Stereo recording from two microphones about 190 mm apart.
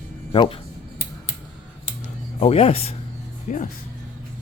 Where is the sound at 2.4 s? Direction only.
30° left (ahead or behind).